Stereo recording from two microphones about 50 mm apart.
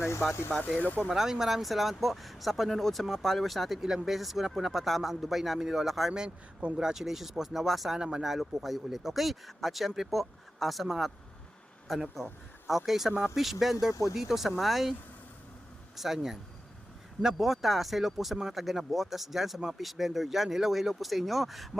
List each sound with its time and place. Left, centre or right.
0.0 s speech: left
0.6 s speech: left
1.0 s speech: centre
6.1 s speech: centre
7.9 s speech: centre
8.2 s speech: centre
12.1 s speech: centre
16.0 s speech: centre